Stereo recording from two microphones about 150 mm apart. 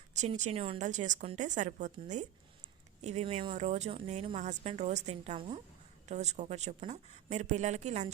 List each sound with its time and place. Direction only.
0.1 s a woman's voice: 50° right (ahead or behind)